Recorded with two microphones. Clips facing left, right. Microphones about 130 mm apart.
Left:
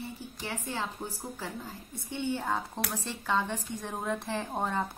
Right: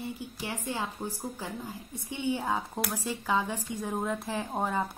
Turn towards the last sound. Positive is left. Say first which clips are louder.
# right 1 dB
turn(degrees=-5)  # may be behind; listen again after turning